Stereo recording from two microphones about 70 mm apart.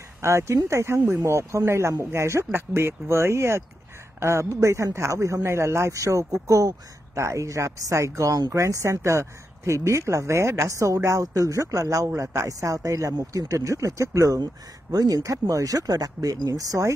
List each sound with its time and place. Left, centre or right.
0.2 s speech: right
14.4 s speech: right